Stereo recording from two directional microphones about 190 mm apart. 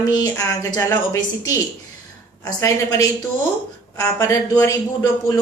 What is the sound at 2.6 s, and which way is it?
Speech, 15° left (ahead or behind).